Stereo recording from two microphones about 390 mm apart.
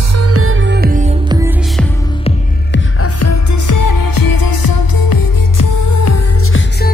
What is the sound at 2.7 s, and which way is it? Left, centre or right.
Music, left.